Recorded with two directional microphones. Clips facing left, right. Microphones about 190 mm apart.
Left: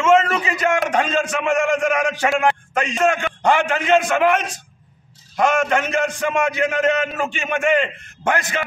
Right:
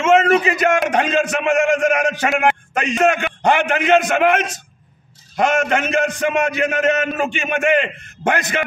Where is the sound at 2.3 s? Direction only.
20° right (ahead or behind).